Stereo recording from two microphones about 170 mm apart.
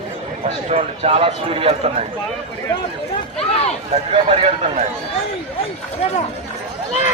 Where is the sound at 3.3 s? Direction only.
35° left (ahead or behind).